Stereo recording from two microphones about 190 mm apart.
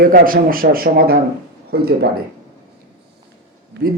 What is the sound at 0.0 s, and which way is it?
A man's voice, 50° right (ahead or behind).